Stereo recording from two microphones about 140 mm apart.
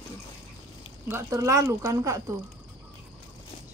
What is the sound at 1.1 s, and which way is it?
Speech, 20° right (ahead or behind).